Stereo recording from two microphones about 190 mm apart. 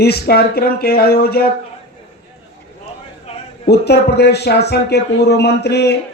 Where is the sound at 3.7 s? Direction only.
60° left (ahead or behind).